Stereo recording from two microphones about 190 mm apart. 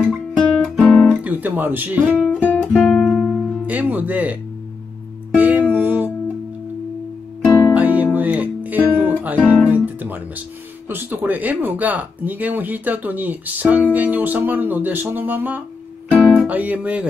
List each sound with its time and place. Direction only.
0.1 s music: centre (ahead or behind)
1.3 s speech: 10° right (ahead or behind)
2.4 s music: 10° left (ahead or behind)
3.6 s music: 10° right (ahead or behind)
7.7 s music: 10° right (ahead or behind)
10.9 s speech: 10° right (ahead or behind)
16.1 s music: 5° left (ahead or behind)
16.3 s music: 10° right (ahead or behind)